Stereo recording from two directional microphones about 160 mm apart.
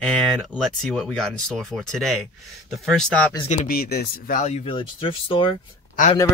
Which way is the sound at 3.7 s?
70° left (ahead or behind).